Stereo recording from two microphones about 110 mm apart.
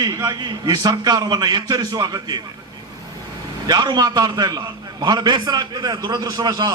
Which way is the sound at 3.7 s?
40° right (ahead or behind).